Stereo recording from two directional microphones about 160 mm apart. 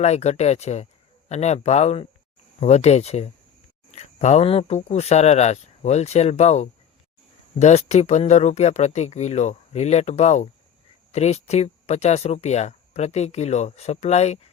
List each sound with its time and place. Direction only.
0.0 s speech: 45° left (ahead or behind)